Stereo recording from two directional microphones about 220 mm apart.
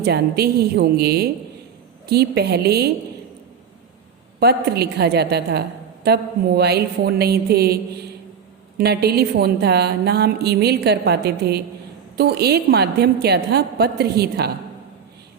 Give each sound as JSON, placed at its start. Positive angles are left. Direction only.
{"t": 0.0, "sound": "a woman's voice", "side_deg": -45}
{"t": 4.4, "sound": "a woman's voice", "side_deg": -45}